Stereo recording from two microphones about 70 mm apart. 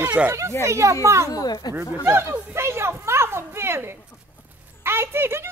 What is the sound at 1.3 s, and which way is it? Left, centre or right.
Speech, left.